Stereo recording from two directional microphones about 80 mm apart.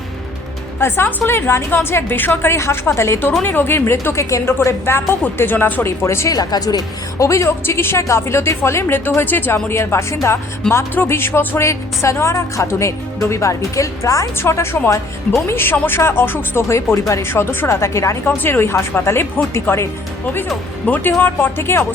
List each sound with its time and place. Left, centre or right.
0.8 s a woman's voice: left
6.3 s speech: left
7.2 s speech: left
18.3 s speech: left
20.8 s a woman's voice: left